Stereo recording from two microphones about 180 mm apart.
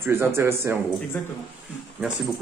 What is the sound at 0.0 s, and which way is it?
Speech, 15° right (ahead or behind).